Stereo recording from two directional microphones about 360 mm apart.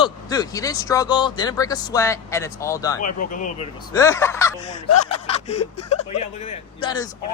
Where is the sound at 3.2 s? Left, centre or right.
Left.